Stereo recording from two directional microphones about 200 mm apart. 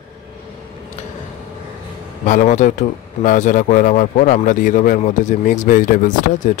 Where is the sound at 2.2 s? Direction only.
40° left (ahead or behind).